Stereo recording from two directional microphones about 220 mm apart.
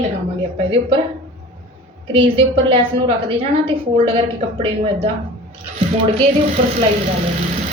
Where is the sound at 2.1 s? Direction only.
25° right (ahead or behind).